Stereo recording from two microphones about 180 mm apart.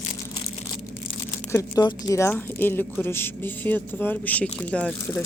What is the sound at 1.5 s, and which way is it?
A woman's voice, 20° left (ahead or behind).